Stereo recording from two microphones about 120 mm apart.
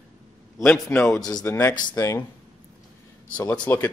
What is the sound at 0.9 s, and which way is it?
Speech, 25° left (ahead or behind).